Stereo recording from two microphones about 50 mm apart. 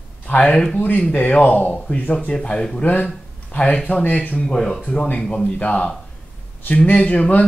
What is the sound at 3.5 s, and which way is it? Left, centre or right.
Speech, left.